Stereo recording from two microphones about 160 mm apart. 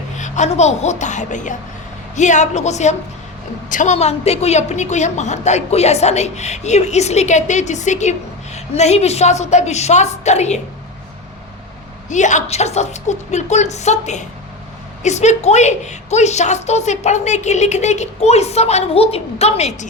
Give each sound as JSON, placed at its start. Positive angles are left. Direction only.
{"t": 0.2, "sound": "a woman's voice", "side_deg": 45}
{"t": 12.0, "sound": "a woman's voice", "side_deg": 50}